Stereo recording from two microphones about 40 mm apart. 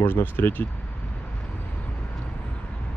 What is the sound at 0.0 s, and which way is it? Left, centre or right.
Speech, left.